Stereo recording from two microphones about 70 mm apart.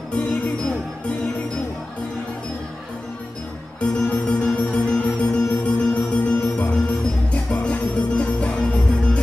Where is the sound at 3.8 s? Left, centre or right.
Centre.